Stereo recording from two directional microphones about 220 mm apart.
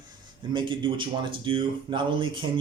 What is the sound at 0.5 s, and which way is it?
Speech, 20° right (ahead or behind).